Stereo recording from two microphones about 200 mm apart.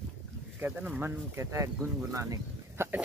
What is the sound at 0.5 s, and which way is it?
Speech, 10° right (ahead or behind).